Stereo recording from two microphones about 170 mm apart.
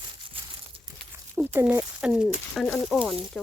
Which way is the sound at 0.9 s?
20° right (ahead or behind).